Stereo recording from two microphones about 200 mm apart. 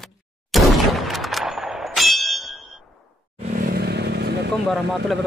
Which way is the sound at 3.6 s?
55° right (ahead or behind).